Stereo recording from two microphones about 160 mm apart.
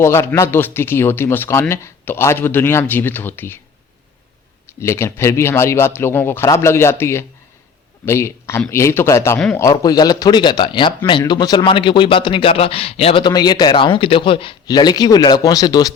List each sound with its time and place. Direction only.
0.0 s speech: 15° left (ahead or behind)
4.8 s speech: 15° left (ahead or behind)